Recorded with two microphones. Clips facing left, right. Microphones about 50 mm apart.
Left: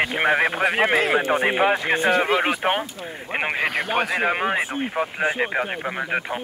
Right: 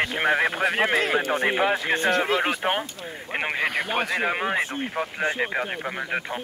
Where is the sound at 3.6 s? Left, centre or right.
Centre.